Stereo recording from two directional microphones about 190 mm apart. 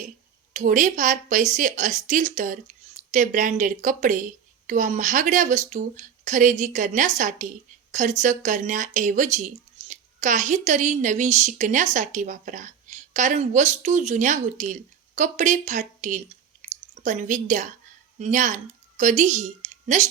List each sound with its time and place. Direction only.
0.5 s a woman's voice: 45° right (ahead or behind)